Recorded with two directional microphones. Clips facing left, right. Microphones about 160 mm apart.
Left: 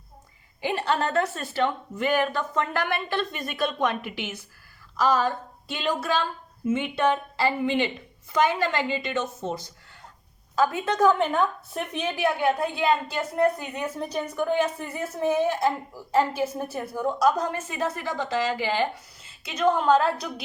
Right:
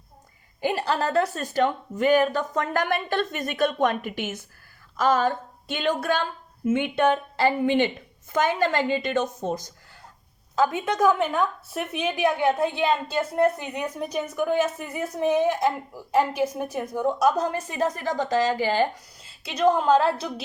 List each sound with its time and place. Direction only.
0.6 s a woman's voice: 35° right (ahead or behind)
10.5 s a woman's voice: 20° right (ahead or behind)
18.1 s a woman's voice: 45° right (ahead or behind)
19.4 s a woman's voice: 35° right (ahead or behind)